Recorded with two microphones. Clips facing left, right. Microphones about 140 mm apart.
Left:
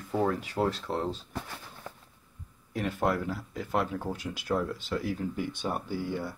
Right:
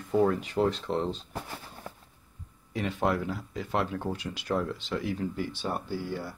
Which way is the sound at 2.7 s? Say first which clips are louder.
Even; 10° left (ahead or behind).